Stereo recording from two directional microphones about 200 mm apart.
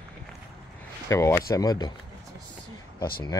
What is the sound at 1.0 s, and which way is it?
Speech, 15° left (ahead or behind).